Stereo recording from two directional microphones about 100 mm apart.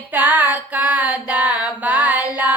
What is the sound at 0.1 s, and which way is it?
Music, 15° right (ahead or behind).